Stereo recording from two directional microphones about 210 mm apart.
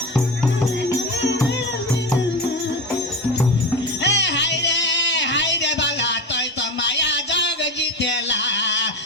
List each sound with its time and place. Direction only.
4.0 s music: 55° left (ahead or behind)